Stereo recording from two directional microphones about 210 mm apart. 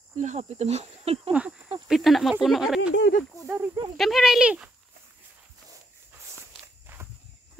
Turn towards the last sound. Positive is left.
turn(degrees=-10)  # may be behind; listen again after turning